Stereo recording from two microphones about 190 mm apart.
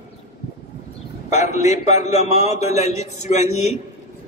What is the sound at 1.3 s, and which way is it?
A man's voice, 35° left (ahead or behind).